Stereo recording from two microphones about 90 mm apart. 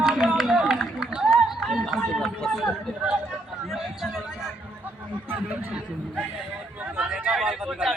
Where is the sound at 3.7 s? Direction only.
5° right (ahead or behind).